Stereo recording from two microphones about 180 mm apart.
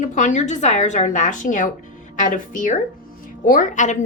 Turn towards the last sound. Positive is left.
turn(degrees=40)  # may be behind; listen again after turning